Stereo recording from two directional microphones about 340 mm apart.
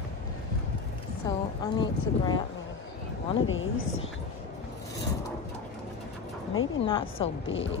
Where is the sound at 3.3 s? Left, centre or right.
Left.